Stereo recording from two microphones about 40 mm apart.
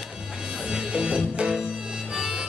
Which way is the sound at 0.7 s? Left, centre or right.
Right.